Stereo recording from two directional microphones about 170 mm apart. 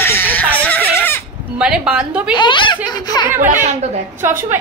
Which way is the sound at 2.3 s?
30° left (ahead or behind).